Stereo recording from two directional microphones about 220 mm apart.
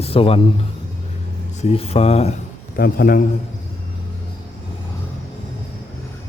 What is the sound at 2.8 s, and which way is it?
Speech, 40° left (ahead or behind).